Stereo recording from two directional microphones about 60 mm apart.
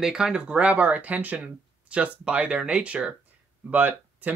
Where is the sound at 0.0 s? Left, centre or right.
Centre.